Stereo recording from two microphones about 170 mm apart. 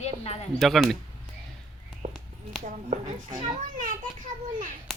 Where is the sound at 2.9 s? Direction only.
50° right (ahead or behind).